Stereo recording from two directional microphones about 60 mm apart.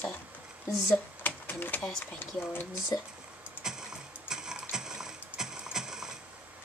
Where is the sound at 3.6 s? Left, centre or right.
Centre.